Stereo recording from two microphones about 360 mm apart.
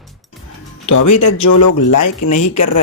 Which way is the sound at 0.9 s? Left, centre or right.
Left.